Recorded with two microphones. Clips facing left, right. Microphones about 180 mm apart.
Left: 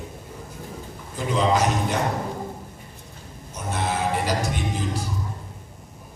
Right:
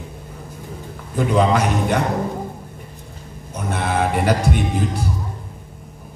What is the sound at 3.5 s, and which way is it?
Music, 60° right (ahead or behind).